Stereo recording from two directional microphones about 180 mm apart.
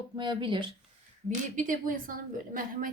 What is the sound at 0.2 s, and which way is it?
Speech, 25° right (ahead or behind).